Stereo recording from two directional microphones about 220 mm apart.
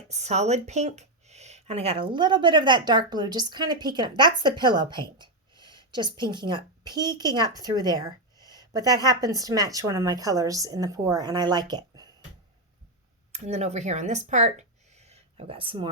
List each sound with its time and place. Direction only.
0.1 s speech: 30° right (ahead or behind)
13.3 s speech: 30° right (ahead or behind)